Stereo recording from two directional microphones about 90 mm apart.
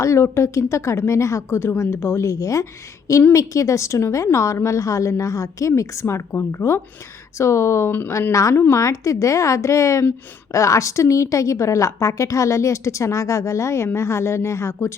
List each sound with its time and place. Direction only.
0.0 s a woman's voice: 35° left (ahead or behind)